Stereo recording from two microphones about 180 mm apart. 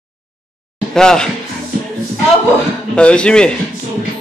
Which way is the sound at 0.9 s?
5° left (ahead or behind).